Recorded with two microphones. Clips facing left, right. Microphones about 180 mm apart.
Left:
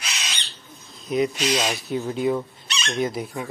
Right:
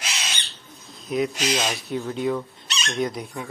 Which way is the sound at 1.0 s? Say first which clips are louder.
Left 2 dB; centre (ahead or behind).